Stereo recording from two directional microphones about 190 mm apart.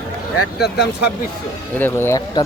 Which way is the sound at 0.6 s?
60° left (ahead or behind).